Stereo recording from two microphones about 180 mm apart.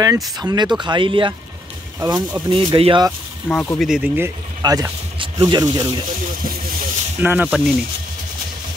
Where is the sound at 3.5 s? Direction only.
15° left (ahead or behind).